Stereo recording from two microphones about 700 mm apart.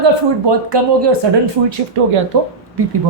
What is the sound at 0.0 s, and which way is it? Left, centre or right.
Speech, right.